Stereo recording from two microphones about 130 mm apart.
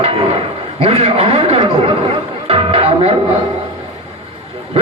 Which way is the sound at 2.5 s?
50° right (ahead or behind).